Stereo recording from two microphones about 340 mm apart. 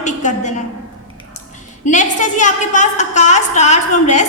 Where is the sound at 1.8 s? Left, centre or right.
Left.